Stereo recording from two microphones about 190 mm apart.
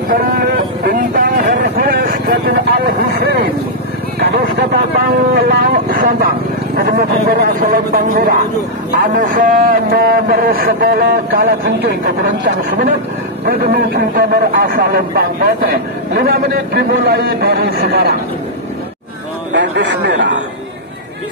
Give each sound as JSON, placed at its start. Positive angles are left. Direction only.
{"t": 0.1, "sound": "a sound", "side_deg": -50}
{"t": 0.8, "sound": "vehicle", "side_deg": -45}
{"t": 4.2, "sound": "a man's voice", "side_deg": -55}
{"t": 13.5, "sound": "a man's voice", "side_deg": -55}
{"t": 19.5, "sound": "speech", "side_deg": -65}